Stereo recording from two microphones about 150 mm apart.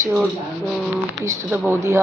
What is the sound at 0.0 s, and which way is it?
A man's voice, 15° right (ahead or behind).